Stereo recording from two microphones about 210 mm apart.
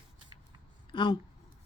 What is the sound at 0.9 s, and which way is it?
Speech, 20° left (ahead or behind).